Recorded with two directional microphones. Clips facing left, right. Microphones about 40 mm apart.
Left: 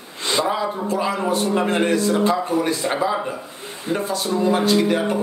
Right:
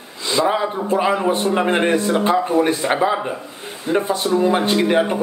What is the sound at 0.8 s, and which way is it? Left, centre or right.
Speech, right.